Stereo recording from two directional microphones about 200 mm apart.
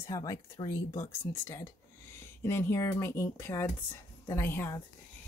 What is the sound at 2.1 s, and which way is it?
Speech, 15° left (ahead or behind).